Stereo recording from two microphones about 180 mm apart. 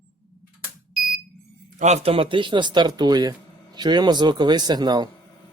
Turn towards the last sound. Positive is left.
turn(degrees=-25)  # may be behind; listen again after turning